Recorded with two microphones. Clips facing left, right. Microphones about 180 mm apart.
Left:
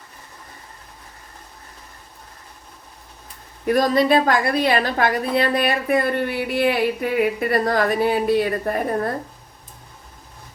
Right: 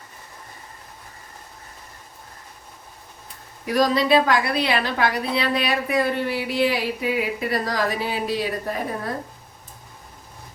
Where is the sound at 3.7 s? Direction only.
50° left (ahead or behind).